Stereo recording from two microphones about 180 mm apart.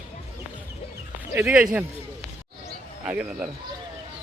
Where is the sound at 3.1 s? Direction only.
5° right (ahead or behind).